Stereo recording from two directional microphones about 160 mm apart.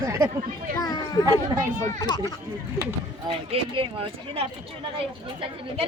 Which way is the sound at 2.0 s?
25° left (ahead or behind).